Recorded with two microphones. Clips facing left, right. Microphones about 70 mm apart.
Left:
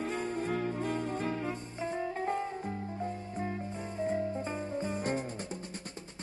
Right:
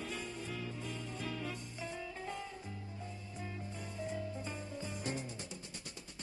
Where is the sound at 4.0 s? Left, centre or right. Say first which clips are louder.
Left 9 dB; left.